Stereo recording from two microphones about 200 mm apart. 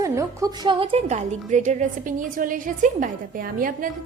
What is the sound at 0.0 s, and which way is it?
A woman's voice, 15° right (ahead or behind).